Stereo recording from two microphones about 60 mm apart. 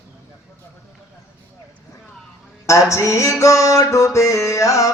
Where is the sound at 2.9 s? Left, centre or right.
Left.